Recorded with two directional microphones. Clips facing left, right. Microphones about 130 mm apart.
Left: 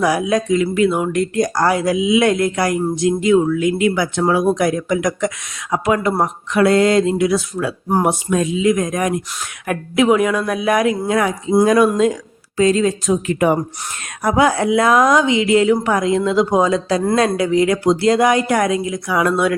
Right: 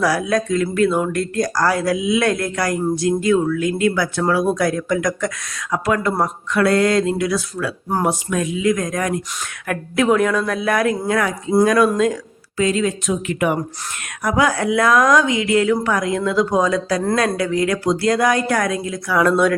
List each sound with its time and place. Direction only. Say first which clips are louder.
0.0 s speech: left 2 dB; 20° left (ahead or behind)
12.5 s speech: left 4 dB; 35° left (ahead or behind); by 19.5 s 10° left (ahead or behind)